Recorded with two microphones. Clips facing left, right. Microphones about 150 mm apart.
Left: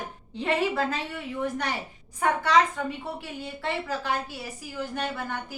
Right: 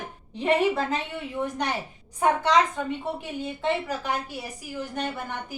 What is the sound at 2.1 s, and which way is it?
A woman's voice, 20° right (ahead or behind).